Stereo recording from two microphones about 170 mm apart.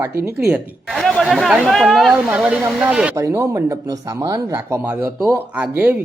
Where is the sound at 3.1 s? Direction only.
15° right (ahead or behind).